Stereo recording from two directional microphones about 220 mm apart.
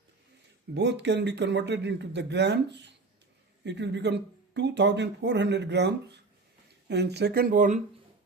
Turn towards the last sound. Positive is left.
turn(degrees=-35)  # may be behind; listen again after turning